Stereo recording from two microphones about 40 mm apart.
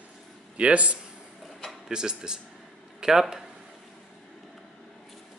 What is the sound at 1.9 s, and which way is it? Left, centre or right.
Speech, centre.